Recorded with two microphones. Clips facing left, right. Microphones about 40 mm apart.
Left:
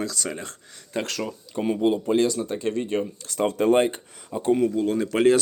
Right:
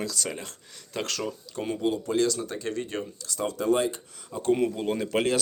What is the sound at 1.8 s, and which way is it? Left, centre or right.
Speech, left.